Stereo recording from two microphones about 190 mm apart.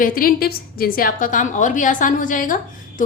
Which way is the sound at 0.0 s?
50° left (ahead or behind).